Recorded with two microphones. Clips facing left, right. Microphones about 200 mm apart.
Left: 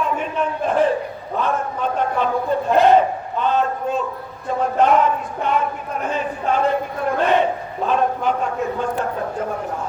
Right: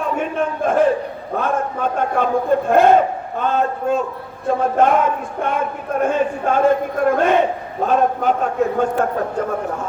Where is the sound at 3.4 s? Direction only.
45° right (ahead or behind).